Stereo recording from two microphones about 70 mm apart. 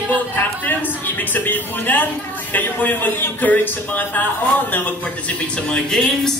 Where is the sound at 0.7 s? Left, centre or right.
Left.